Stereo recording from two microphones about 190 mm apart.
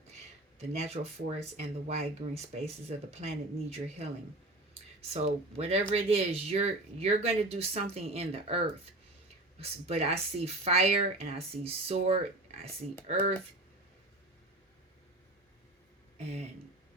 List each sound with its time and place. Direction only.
0.6 s speech: 35° right (ahead or behind)
16.1 s speech: 35° right (ahead or behind)